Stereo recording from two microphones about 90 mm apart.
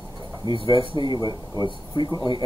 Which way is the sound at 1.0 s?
55° left (ahead or behind).